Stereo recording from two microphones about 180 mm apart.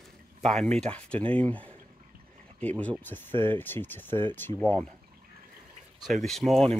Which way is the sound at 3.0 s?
10° left (ahead or behind).